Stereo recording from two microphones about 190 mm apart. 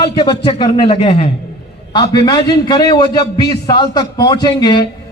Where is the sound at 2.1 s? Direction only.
20° left (ahead or behind).